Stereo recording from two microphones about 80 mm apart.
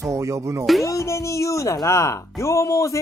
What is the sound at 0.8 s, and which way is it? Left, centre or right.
Speech, left.